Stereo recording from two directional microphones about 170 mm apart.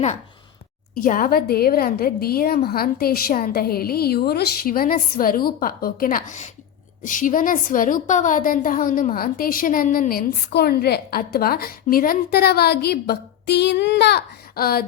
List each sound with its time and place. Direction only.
0.9 s a woman's voice: 50° left (ahead or behind)